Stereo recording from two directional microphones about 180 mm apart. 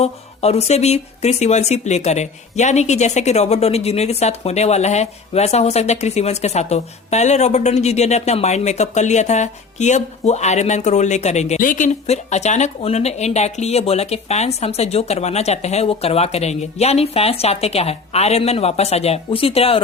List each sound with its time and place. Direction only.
0.0 s speech: 35° left (ahead or behind)